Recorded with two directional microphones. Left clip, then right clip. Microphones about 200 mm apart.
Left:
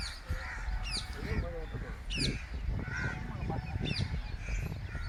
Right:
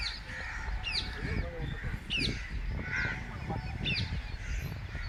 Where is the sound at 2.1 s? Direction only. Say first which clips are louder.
Right 3 dB; 35° left (ahead or behind).